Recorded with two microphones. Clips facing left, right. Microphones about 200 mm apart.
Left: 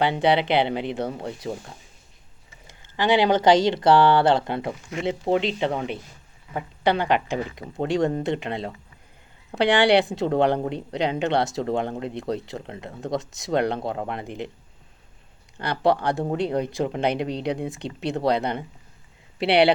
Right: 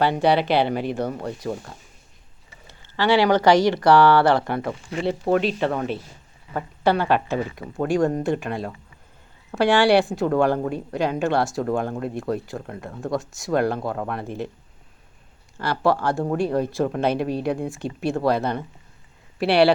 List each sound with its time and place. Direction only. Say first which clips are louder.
0.0 s speech: right 1 dB; 20° left (ahead or behind)
2.9 s speech: right 1 dB; 20° left (ahead or behind)
6.8 s speech: right 2 dB; 15° left (ahead or behind)
15.5 s speech: even; 20° left (ahead or behind)